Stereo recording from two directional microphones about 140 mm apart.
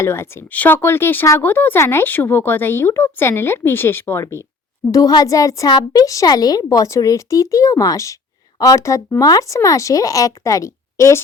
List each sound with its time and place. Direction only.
0.0 s a child's voice: 20° left (ahead or behind)